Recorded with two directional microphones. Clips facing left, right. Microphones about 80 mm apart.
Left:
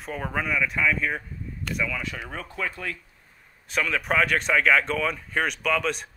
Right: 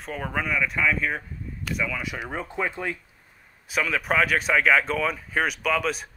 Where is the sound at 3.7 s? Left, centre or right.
Centre.